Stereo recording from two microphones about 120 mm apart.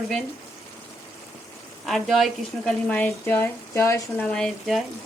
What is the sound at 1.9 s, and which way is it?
Speech, centre (ahead or behind).